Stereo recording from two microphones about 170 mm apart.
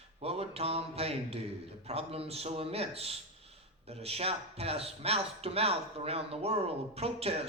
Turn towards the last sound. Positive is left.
turn(degrees=-35)  # may be behind; listen again after turning